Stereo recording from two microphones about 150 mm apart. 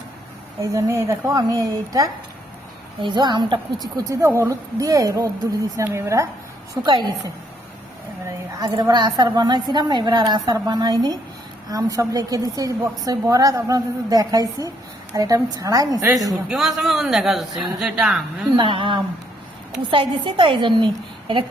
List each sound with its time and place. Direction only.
0.6 s a woman's voice: 20° right (ahead or behind)
4.1 s a woman's voice: 20° right (ahead or behind)
8.5 s a woman's voice: 25° right (ahead or behind)
16.5 s a man's voice: centre (ahead or behind)
18.5 s a woman's voice: 35° right (ahead or behind)